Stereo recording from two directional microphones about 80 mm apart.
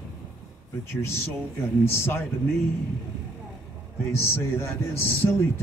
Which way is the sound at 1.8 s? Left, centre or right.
Left.